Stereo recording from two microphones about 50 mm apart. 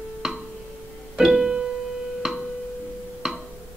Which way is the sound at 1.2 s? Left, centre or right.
Centre.